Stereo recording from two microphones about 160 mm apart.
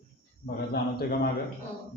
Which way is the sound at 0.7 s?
75° left (ahead or behind).